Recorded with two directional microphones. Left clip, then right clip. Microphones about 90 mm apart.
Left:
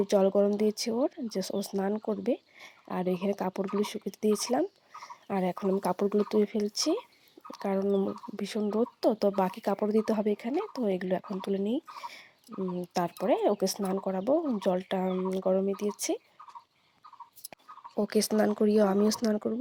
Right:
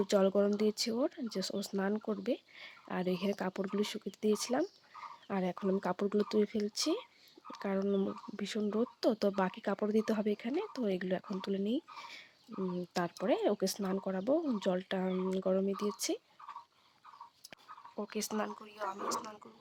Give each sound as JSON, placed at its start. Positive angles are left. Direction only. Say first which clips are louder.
{"t": 0.0, "sound": "speech", "louder": "left 5 dB", "side_deg": 25}
{"t": 1.2, "sound": "speech", "louder": "left 5 dB", "side_deg": 30}
{"t": 18.0, "sound": "speech", "louder": "left 12 dB", "side_deg": 55}
{"t": 18.6, "sound": "speech", "louder": "left 15 dB", "side_deg": 45}